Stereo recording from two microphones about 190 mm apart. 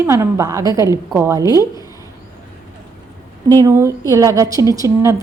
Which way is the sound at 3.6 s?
15° right (ahead or behind).